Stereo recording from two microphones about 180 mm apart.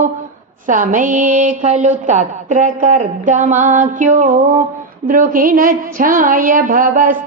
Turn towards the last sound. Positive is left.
turn(degrees=-50)  # may be behind; listen again after turning